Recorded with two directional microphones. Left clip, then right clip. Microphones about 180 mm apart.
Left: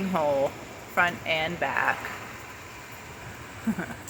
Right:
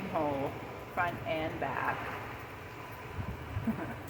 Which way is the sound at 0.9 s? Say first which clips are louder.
Left 9 dB; 45° left (ahead or behind).